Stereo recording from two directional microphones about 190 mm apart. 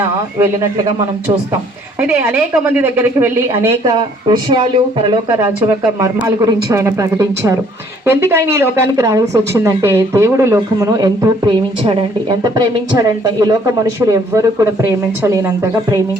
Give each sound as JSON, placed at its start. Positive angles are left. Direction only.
{"t": 2.0, "sound": "a woman's voice", "side_deg": -10}
{"t": 5.3, "sound": "a woman's voice", "side_deg": -15}